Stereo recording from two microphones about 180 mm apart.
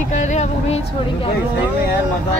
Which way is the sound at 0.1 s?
40° left (ahead or behind).